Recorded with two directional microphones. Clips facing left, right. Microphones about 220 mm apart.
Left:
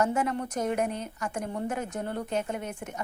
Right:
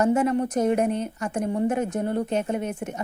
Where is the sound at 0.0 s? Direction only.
25° right (ahead or behind).